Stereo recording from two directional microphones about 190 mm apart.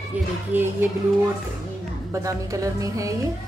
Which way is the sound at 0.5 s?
10° right (ahead or behind).